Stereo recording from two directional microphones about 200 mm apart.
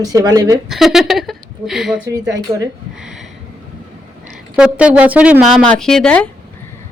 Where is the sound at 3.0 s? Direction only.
5° right (ahead or behind).